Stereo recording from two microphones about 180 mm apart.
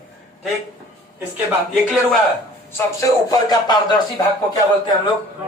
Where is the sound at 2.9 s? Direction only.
20° left (ahead or behind).